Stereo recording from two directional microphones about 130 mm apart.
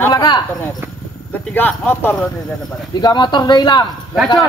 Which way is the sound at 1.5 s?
15° left (ahead or behind).